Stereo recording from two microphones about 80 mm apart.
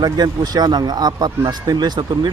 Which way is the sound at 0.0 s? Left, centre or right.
Right.